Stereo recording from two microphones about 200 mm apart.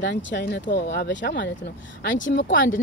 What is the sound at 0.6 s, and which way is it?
Speech, 45° left (ahead or behind).